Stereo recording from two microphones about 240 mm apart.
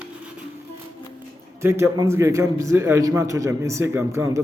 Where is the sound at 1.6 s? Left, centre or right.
Centre.